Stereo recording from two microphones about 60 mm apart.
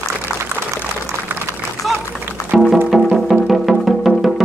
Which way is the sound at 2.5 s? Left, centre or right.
Centre.